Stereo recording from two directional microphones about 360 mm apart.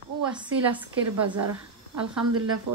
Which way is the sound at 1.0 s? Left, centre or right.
Right.